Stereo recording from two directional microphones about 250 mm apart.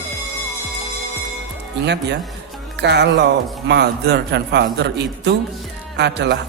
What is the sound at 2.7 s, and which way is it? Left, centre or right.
Speech, right.